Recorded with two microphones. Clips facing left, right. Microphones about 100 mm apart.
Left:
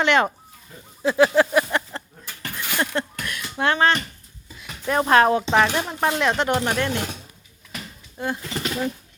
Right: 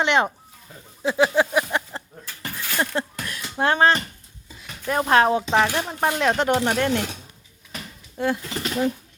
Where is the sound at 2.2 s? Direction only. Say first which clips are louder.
Left 1 dB; 15° left (ahead or behind).